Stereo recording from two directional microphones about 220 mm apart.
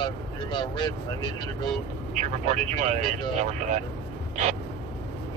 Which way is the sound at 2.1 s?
30° right (ahead or behind).